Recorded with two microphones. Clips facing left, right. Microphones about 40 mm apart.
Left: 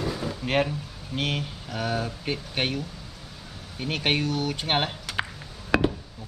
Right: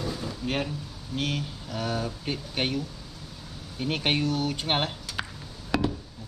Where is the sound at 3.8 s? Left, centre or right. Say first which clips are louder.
Left 1 dB; centre.